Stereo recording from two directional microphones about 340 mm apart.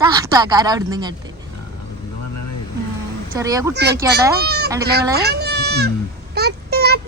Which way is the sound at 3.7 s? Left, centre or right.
Right.